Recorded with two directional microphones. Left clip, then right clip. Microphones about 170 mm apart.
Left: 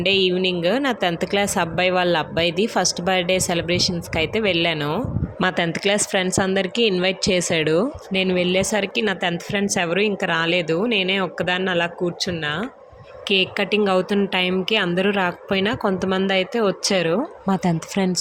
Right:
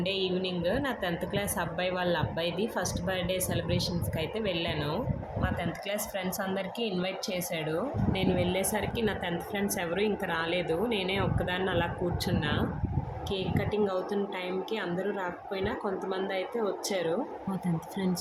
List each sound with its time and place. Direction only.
0.0 s speech: 45° left (ahead or behind)